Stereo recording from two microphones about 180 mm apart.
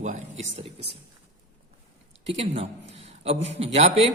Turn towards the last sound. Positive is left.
turn(degrees=-35)  # may be behind; listen again after turning